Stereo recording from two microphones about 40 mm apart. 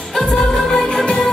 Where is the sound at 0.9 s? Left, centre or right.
Centre.